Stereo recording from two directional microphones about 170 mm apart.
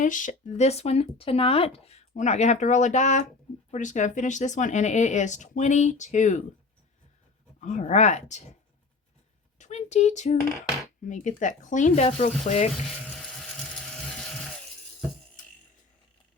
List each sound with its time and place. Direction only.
0.0 s speech: 50° left (ahead or behind)
7.6 s speech: 45° left (ahead or behind)
9.6 s speech: 45° left (ahead or behind)
13.9 s mechanisms: 5° left (ahead or behind)